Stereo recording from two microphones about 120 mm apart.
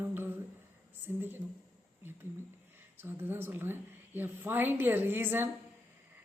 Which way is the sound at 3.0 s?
20° right (ahead or behind).